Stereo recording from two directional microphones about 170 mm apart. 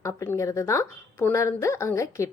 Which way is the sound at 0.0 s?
15° left (ahead or behind).